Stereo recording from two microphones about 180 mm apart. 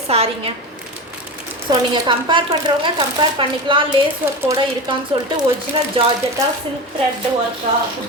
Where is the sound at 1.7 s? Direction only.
25° right (ahead or behind).